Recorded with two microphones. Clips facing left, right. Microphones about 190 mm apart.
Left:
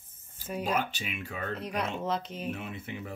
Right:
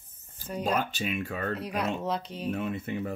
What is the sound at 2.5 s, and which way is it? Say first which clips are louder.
Speech: right 10 dB; 45° right (ahead or behind).